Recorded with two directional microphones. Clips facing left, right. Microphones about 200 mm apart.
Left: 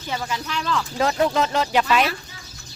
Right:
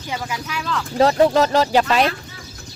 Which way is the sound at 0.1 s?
10° right (ahead or behind).